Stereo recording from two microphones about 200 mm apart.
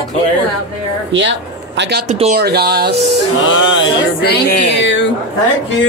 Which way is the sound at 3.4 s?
70° left (ahead or behind).